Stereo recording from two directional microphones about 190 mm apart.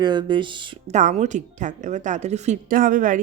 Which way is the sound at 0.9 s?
40° right (ahead or behind).